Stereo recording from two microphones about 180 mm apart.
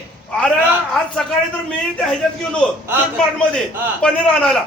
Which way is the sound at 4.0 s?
5° left (ahead or behind).